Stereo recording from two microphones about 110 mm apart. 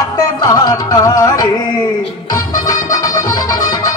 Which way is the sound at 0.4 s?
35° left (ahead or behind).